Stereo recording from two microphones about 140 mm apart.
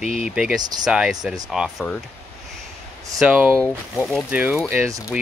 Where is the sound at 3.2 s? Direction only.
10° right (ahead or behind).